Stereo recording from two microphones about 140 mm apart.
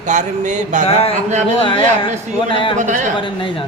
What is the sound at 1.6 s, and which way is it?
Speech, 40° left (ahead or behind).